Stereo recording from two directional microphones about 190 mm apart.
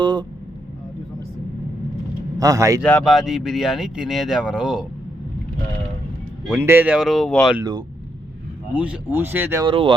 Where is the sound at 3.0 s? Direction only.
Centre (ahead or behind).